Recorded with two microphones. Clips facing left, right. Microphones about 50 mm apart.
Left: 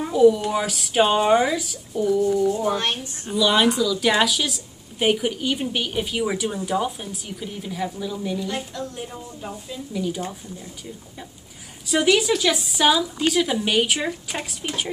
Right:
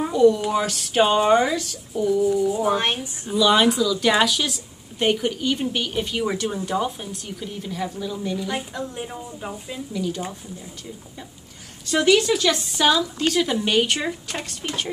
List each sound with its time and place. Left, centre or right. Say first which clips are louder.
0.1 s a woman's voice: left 1 dB; centre
3.3 s a woman's voice: right 1 dB; centre
8.5 s a woman's voice: right 1 dB; centre
9.9 s speech: left 1 dB; centre
11.8 s a woman's voice: right 1 dB; centre